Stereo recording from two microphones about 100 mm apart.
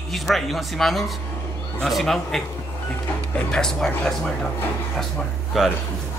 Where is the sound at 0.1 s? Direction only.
Centre (ahead or behind).